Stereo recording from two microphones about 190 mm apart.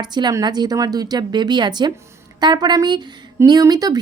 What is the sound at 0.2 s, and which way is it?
Speech, 20° right (ahead or behind).